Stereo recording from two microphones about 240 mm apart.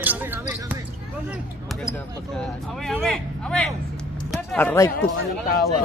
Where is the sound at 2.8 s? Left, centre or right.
Centre.